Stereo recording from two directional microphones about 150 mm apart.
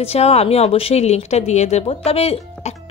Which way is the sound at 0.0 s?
45° left (ahead or behind).